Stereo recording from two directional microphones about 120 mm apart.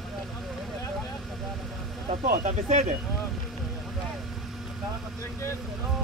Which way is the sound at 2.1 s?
90° right.